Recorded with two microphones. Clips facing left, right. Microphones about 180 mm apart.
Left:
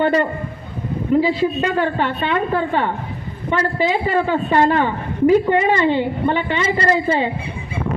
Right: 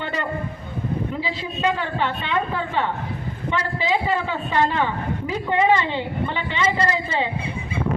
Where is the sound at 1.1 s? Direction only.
50° left (ahead or behind).